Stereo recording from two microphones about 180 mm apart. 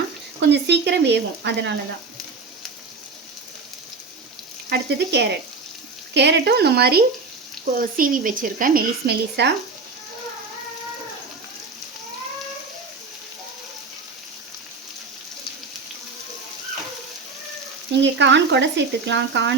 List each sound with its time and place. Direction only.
0.3 s speech: 70° right (ahead or behind)
4.7 s speech: 70° right (ahead or behind)
7.8 s speech: 50° right (ahead or behind); by 9.5 s 65° right (ahead or behind)
17.9 s speech: 80° right